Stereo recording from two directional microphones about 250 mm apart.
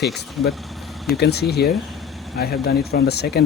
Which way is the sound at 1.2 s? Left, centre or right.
Left.